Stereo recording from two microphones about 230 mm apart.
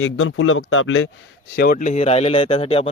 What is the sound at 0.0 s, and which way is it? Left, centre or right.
Speech, left.